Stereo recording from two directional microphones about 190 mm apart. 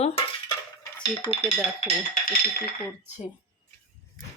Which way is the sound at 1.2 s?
30° left (ahead or behind).